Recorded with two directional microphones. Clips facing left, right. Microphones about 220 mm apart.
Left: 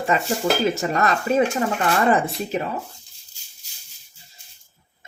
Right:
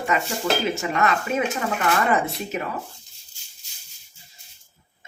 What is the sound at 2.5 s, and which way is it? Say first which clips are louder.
Speech: left 4 dB; 30° left (ahead or behind).